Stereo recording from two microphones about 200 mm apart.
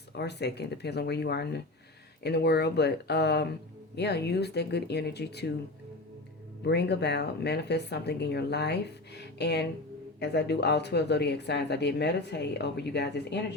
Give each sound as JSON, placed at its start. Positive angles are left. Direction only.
{"t": 0.2, "sound": "speech", "side_deg": 55}
{"t": 6.7, "sound": "speech", "side_deg": 55}